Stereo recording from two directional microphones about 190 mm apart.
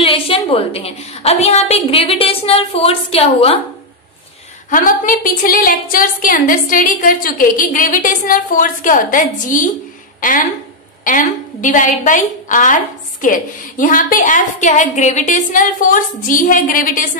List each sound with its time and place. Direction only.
0.0 s a woman's voice: 30° left (ahead or behind)
4.6 s a woman's voice: 45° left (ahead or behind)
11.1 s a woman's voice: 45° left (ahead or behind)